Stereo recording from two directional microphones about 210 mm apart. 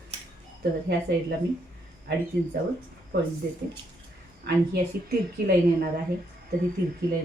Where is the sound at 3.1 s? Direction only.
50° right (ahead or behind).